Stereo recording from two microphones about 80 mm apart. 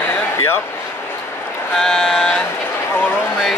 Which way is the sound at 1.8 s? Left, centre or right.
Centre.